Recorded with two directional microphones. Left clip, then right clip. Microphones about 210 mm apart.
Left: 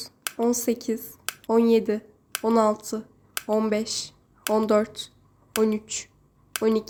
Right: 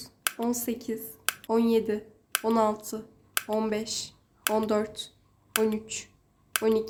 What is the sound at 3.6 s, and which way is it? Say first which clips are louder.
Speech: left 4 dB; 15° left (ahead or behind).